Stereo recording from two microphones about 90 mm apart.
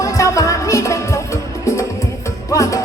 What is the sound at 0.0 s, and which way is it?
Music, 35° left (ahead or behind).